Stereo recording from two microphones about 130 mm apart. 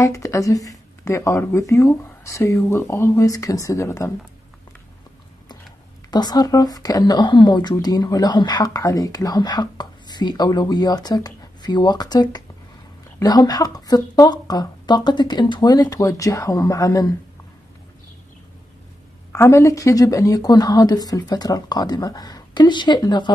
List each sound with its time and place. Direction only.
0.0 s speech: 25° left (ahead or behind)
6.0 s speech: 30° left (ahead or behind)
19.3 s speech: 20° left (ahead or behind)